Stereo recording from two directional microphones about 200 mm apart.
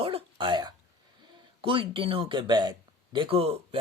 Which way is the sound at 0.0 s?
30° right (ahead or behind).